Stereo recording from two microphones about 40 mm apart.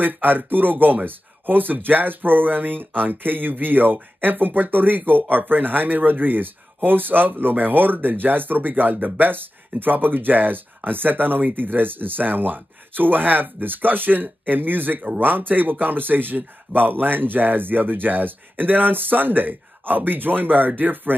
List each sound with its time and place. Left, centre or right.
0.0 s a man's voice: right